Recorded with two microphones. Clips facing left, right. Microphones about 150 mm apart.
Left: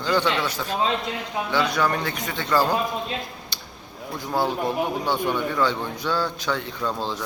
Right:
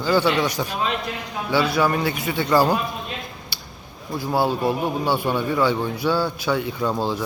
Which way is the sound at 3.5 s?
10° right (ahead or behind).